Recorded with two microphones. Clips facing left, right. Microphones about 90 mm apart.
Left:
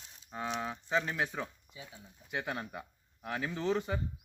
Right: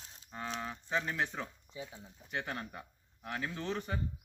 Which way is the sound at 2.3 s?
15° left (ahead or behind).